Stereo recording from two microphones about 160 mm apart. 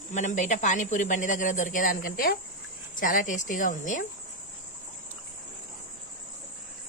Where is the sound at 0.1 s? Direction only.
50° left (ahead or behind).